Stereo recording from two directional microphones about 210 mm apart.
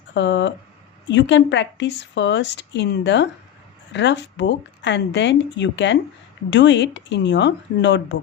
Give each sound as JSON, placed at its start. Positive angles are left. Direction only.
{"t": 0.1, "sound": "a woman's voice", "side_deg": 55}